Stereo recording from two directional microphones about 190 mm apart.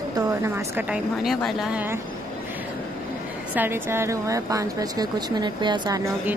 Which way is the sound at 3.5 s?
10° right (ahead or behind).